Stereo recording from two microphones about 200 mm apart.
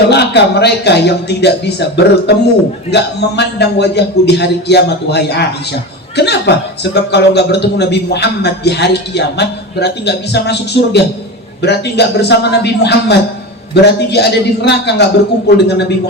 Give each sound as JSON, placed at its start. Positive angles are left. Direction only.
{"t": 0.1, "sound": "a man's voice", "side_deg": 55}